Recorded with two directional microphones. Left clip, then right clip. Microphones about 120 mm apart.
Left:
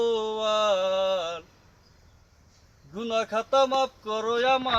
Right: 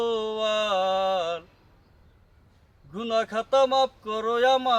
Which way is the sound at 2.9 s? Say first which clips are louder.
Right 1 dB; 40° right (ahead or behind).